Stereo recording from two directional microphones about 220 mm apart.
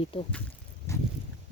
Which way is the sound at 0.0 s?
25° left (ahead or behind).